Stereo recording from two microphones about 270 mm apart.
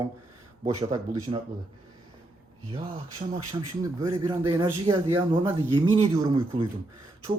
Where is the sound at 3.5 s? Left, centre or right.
Centre.